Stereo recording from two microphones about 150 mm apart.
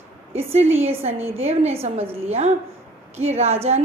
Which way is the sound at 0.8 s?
40° right (ahead or behind).